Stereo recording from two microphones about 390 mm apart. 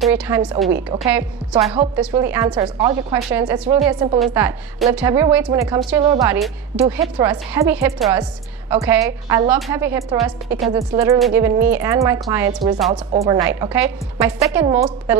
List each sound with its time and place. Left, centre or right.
0.0 s a woman's voice: centre
1.6 s a woman's voice: centre
2.0 s a woman's voice: centre